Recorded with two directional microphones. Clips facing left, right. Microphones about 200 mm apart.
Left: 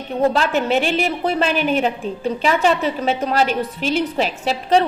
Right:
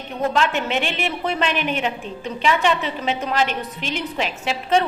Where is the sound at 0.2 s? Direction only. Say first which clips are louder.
Left 4 dB; 35° left (ahead or behind).